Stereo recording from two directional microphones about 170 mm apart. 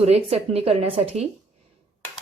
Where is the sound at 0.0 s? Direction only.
40° right (ahead or behind).